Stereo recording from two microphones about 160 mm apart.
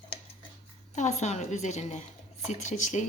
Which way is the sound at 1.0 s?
45° left (ahead or behind).